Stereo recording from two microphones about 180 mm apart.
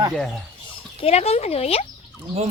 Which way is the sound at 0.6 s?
35° left (ahead or behind).